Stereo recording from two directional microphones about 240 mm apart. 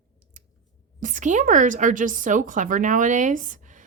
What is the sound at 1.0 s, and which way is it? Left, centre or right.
Speech, right.